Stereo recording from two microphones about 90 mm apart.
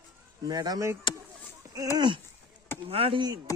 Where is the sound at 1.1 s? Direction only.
65° left (ahead or behind).